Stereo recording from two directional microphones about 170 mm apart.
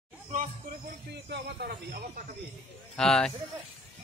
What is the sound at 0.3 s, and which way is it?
Speech, 50° right (ahead or behind).